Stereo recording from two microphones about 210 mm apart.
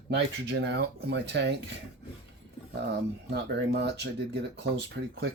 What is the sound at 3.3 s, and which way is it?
Speech, 50° right (ahead or behind).